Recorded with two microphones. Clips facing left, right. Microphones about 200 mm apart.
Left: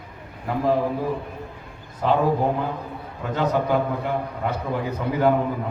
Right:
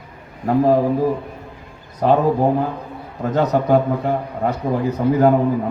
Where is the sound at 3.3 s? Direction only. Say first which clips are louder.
Right 5 dB; 40° right (ahead or behind).